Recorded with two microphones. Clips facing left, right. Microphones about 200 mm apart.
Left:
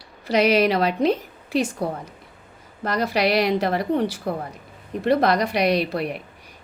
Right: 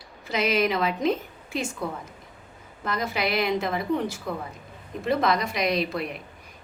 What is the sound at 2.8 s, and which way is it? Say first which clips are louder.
A woman's voice: left 6 dB; 75° left (ahead or behind).